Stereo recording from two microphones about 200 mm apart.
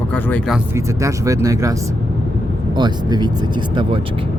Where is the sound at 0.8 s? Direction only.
15° right (ahead or behind).